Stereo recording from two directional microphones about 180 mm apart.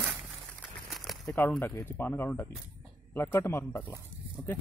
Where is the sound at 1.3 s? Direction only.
10° left (ahead or behind).